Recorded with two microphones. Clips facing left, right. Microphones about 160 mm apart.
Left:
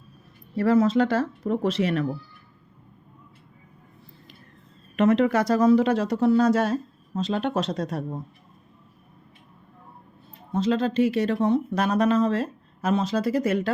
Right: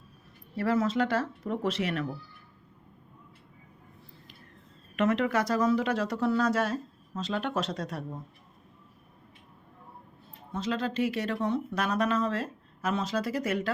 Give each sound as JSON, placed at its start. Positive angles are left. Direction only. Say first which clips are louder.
{"t": 0.5, "sound": "speech", "louder": "left 7 dB", "side_deg": 35}
{"t": 4.9, "sound": "speech", "louder": "left 6 dB", "side_deg": 25}
{"t": 10.5, "sound": "speech", "louder": "left 8 dB", "side_deg": 30}